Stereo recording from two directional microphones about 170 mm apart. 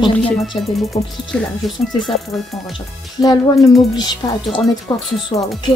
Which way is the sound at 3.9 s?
25° left (ahead or behind).